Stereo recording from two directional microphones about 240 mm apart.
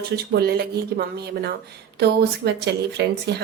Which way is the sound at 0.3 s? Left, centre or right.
Right.